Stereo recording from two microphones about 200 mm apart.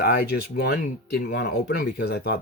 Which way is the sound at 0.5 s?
55° left (ahead or behind).